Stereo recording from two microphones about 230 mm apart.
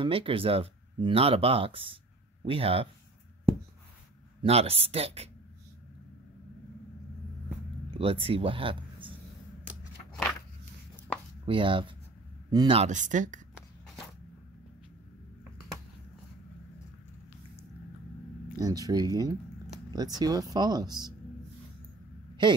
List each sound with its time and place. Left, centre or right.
0.0 s speech: right
4.4 s speech: right
8.0 s speech: right
11.4 s speech: right
18.6 s speech: centre
22.4 s speech: centre